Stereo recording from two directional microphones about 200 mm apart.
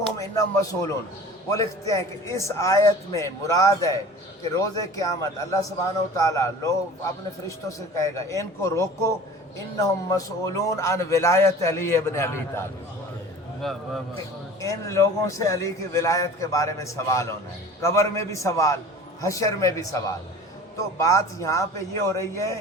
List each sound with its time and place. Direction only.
0.2 s a man's voice: 15° left (ahead or behind)
13.6 s a man's voice: centre (ahead or behind)
14.6 s a man's voice: 15° left (ahead or behind)